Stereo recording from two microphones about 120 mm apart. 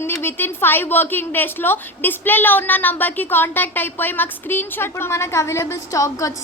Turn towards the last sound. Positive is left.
turn(degrees=25)  # may be behind; listen again after turning